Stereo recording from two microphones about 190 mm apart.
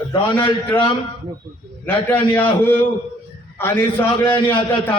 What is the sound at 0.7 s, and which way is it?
Speech, 25° left (ahead or behind).